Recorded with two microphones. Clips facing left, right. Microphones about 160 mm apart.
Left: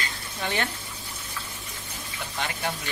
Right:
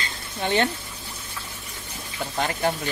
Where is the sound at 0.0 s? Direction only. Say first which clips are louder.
Right 3 dB; 25° right (ahead or behind).